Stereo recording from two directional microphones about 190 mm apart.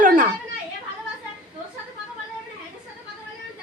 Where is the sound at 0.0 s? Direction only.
45° right (ahead or behind).